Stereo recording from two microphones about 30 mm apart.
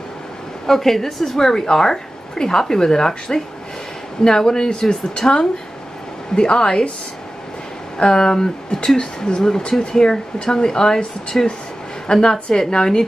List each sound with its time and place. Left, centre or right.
0.7 s a woman's voice: centre
6.3 s a woman's voice: left
8.0 s a woman's voice: left